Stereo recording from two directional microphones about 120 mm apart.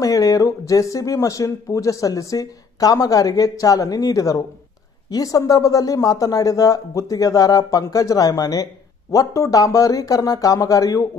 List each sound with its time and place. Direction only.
0.0 s speech: 30° left (ahead or behind)